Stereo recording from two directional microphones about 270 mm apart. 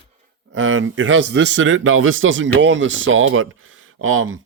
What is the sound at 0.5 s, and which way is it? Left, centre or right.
A man's voice, right.